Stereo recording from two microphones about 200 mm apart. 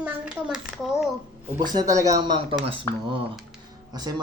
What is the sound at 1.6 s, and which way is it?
Speech, 20° right (ahead or behind).